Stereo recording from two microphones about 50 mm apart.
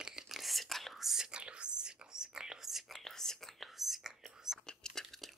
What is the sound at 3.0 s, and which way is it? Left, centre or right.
Whispering, centre.